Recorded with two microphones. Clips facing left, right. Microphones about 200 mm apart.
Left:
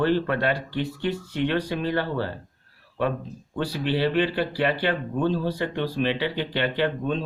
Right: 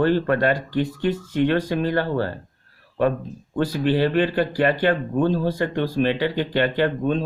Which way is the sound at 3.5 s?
50° right (ahead or behind).